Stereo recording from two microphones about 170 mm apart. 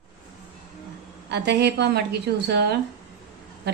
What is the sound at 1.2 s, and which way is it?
A woman's voice, 80° right.